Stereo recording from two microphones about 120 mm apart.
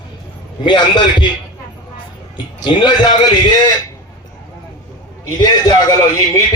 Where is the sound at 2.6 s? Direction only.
40° left (ahead or behind).